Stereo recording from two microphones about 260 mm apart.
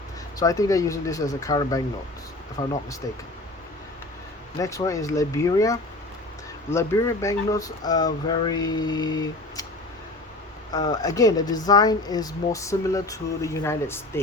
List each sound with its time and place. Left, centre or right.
0.3 s speech: centre
4.5 s speech: centre
10.7 s speech: centre